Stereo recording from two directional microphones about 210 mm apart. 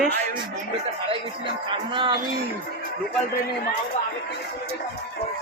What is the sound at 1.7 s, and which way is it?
Music, 25° right (ahead or behind).